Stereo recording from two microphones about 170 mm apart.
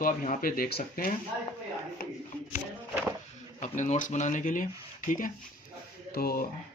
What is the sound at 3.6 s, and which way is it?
Speech, 45° left (ahead or behind).